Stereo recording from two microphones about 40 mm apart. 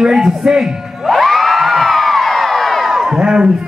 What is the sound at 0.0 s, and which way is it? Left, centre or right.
Speech, centre.